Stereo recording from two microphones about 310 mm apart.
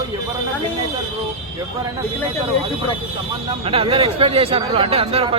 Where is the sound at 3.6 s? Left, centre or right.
Centre.